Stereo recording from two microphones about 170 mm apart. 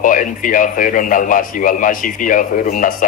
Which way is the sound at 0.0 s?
50° left (ahead or behind).